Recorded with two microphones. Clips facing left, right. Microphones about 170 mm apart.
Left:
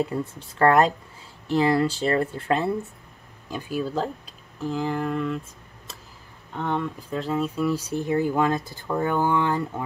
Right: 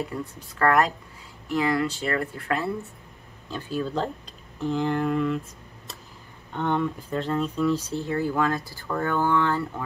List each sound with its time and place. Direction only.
0.4 s speech: 25° left (ahead or behind)
3.4 s speech: 10° left (ahead or behind)
4.6 s a sound: centre (ahead or behind)
6.5 s speech: centre (ahead or behind); by 9.8 s 15° left (ahead or behind)